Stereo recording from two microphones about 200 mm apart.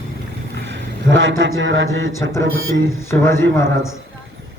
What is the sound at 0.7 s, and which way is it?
A man's voice, 70° right (ahead or behind).